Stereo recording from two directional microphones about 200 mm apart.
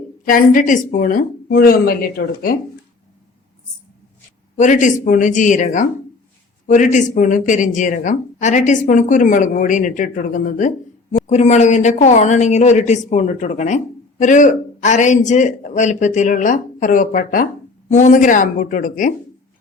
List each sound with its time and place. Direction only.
0.3 s a woman's voice: 45° left (ahead or behind)
4.5 s speech: 40° left (ahead or behind)